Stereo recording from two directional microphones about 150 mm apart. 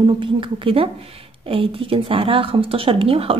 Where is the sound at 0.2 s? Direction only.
35° right (ahead or behind).